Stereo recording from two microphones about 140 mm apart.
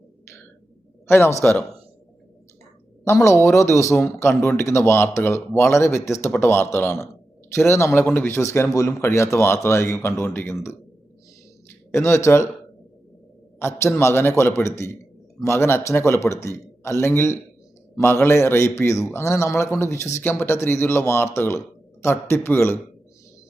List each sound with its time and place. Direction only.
1.0 s a man's voice: 15° left (ahead or behind)
3.0 s speech: 20° left (ahead or behind)
11.9 s speech: 20° left (ahead or behind)
13.6 s a man's voice: 20° left (ahead or behind)